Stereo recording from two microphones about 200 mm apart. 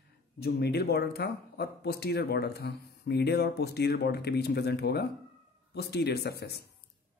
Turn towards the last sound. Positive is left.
turn(degrees=55)  # may be behind; listen again after turning